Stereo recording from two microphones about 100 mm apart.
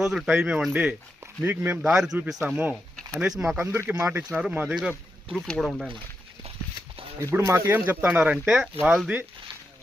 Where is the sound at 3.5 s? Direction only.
25° right (ahead or behind).